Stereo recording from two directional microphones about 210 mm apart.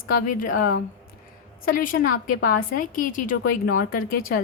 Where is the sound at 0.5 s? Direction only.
45° left (ahead or behind).